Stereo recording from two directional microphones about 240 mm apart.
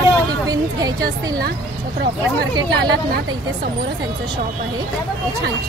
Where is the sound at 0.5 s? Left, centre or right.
Centre.